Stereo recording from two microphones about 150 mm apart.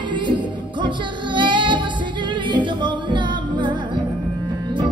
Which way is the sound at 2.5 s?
30° right (ahead or behind).